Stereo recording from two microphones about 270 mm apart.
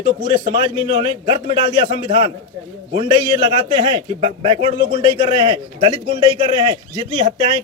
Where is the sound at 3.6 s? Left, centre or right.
Centre.